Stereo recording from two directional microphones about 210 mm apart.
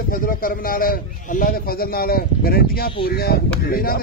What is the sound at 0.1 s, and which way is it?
Speech, 45° left (ahead or behind).